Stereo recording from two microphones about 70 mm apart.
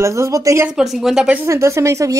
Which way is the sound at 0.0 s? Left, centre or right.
Right.